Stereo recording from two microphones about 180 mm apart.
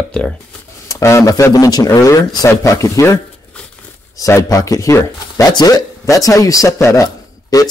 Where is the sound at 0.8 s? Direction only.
15° left (ahead or behind).